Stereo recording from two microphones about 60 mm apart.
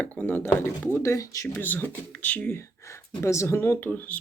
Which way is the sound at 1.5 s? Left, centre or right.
Left.